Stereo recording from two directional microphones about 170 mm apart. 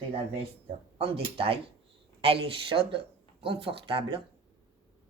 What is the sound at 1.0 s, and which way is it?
Speech, 35° right (ahead or behind).